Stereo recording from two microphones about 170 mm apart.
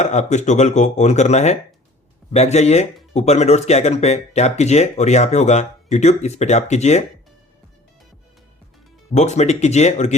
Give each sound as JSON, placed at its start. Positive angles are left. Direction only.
{"t": 0.0, "sound": "speech", "side_deg": 40}
{"t": 9.1, "sound": "speech", "side_deg": 40}